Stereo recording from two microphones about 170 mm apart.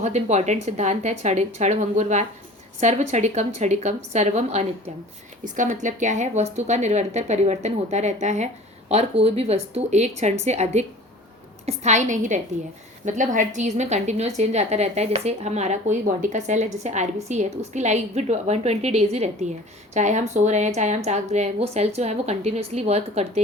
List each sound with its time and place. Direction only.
0.0 s a woman's voice: 40° right (ahead or behind)